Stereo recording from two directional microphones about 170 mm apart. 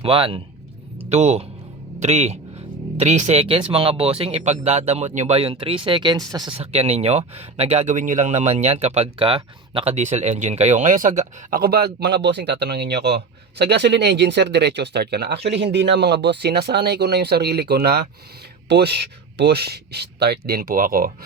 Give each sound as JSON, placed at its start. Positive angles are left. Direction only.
{"t": 0.0, "sound": "speech", "side_deg": -30}
{"t": 6.6, "sound": "speech", "side_deg": -35}